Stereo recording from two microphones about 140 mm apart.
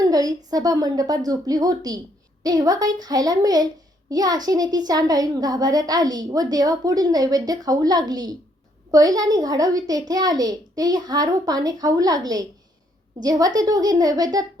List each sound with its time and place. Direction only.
0.0 s a child's voice: 25° right (ahead or behind)